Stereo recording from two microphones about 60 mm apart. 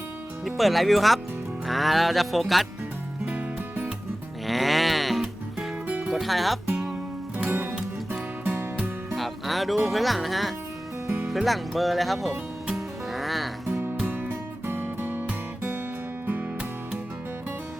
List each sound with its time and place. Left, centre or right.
0.4 s speech: centre
3.2 s music: right
4.4 s music: centre
6.1 s speech: centre
7.3 s music: right
9.1 s speech: centre
12.3 s music: centre
13.1 s music: centre
13.7 s music: right